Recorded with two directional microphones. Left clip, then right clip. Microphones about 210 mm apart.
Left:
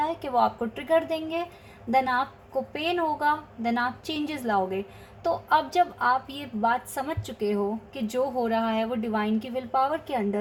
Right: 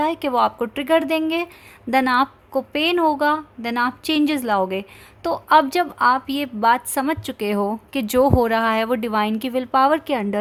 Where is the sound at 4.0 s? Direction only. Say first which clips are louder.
Right 10 dB; 45° right (ahead or behind).